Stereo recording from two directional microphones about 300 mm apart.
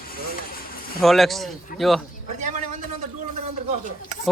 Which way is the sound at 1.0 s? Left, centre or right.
Centre.